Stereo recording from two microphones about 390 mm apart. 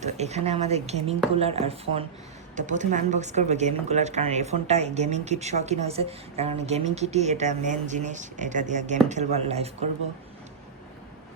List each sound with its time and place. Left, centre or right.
0.0 s speech: centre